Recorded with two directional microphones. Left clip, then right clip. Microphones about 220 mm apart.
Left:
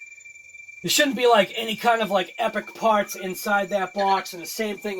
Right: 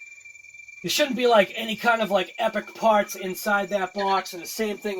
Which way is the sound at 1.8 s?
25° left (ahead or behind).